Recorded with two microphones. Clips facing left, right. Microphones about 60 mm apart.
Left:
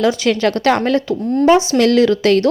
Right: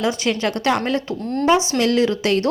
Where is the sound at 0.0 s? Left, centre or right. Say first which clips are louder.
Left 6 dB; right.